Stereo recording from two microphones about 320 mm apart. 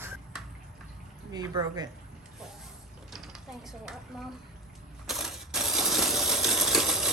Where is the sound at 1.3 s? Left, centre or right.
Centre.